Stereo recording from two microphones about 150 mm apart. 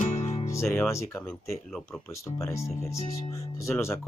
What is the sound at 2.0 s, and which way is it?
Speech, 20° left (ahead or behind).